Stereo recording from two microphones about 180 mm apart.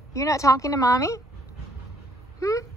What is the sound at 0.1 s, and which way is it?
A woman's voice, 15° left (ahead or behind).